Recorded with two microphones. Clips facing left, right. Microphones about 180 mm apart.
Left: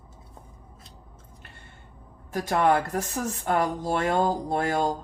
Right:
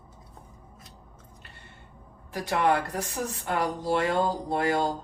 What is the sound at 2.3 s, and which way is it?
Speech, 50° left (ahead or behind).